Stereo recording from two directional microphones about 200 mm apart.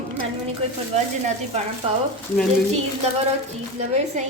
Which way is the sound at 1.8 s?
25° right (ahead or behind).